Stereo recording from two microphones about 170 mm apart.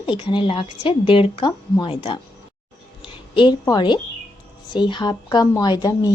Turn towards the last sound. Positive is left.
turn(degrees=25)  # may be behind; listen again after turning